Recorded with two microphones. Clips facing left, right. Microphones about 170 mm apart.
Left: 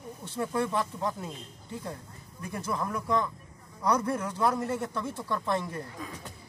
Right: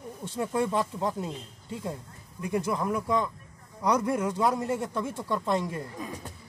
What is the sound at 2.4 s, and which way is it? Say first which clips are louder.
Speech: right 5 dB; 20° right (ahead or behind).